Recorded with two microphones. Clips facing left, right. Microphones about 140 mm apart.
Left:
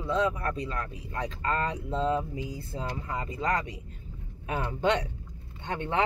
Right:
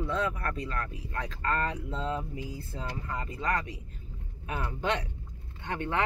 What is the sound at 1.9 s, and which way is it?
Speech, 35° left (ahead or behind).